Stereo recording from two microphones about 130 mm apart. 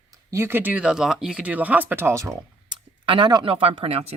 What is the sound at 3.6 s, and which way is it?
Speech, 45° right (ahead or behind).